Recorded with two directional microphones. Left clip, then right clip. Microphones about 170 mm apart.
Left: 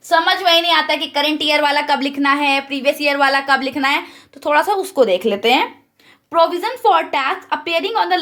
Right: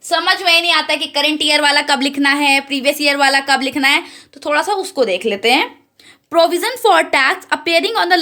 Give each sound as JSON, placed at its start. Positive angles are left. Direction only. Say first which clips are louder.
{"t": 0.1, "sound": "a woman's voice", "louder": "even", "side_deg": -10}
{"t": 4.4, "sound": "speech", "louder": "left 1 dB", "side_deg": 0}
{"t": 6.3, "sound": "a woman's voice", "louder": "right 2 dB", "side_deg": -45}